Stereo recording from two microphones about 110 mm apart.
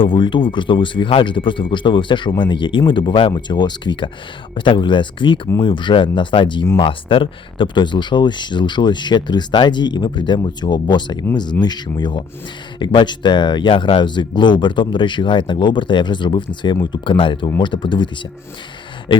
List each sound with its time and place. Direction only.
0.0 s speech: 50° left (ahead or behind)